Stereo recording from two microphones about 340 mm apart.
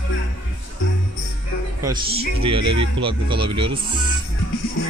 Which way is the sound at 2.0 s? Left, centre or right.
Right.